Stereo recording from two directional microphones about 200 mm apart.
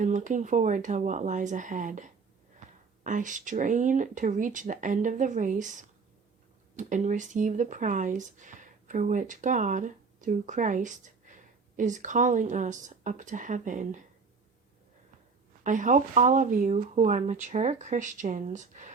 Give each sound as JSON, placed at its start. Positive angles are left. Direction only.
{"t": 0.0, "sound": "speech", "side_deg": -40}
{"t": 15.6, "sound": "speech", "side_deg": -40}